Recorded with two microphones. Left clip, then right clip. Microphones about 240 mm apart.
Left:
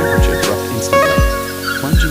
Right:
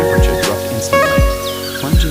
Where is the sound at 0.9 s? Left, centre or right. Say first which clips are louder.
Left 1 dB; left.